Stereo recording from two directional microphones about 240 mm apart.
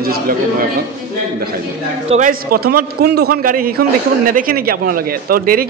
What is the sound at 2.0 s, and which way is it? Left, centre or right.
A man's voice, right.